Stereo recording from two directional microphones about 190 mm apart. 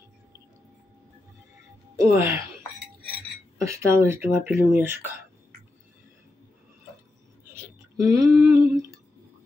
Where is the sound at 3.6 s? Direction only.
15° right (ahead or behind).